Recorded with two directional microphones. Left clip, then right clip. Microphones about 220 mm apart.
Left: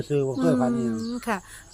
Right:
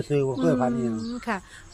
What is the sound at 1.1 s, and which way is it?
Speech, 20° left (ahead or behind).